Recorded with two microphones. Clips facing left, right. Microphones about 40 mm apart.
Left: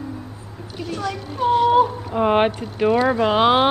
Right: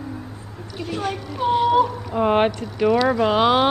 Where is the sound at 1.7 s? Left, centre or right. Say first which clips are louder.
Left 2 dB; left.